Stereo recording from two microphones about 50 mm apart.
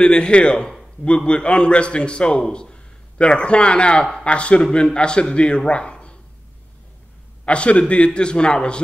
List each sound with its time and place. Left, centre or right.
0.0 s a man's voice: centre
5.7 s a sound: left
7.4 s a man's voice: left